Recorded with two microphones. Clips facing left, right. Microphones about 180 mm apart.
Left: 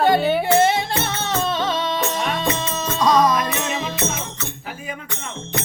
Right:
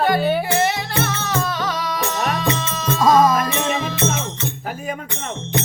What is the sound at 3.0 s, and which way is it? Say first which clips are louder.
Music: right 2 dB; 25° right (ahead or behind).